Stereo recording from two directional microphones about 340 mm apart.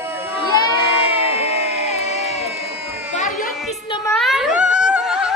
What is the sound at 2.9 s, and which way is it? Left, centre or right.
Children playing, centre.